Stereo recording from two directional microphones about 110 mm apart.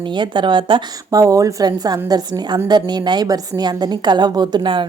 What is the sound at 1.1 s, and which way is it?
A woman's voice, 30° right (ahead or behind).